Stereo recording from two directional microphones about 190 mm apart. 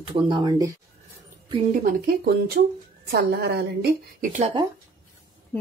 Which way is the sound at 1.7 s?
50° right (ahead or behind).